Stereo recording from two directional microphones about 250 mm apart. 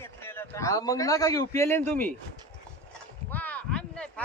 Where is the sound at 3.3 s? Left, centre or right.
Centre.